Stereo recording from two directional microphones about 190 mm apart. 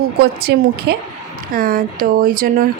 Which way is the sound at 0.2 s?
55° right (ahead or behind).